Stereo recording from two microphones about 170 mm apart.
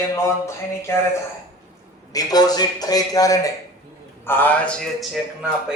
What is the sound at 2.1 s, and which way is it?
A man's voice, 25° left (ahead or behind).